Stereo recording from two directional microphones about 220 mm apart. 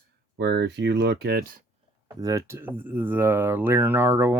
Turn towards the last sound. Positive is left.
turn(degrees=-10)  # may be behind; listen again after turning